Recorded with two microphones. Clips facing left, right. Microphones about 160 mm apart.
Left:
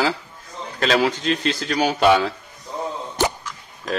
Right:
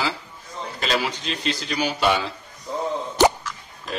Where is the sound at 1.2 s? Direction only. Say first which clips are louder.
Left 5 dB; 50° left (ahead or behind).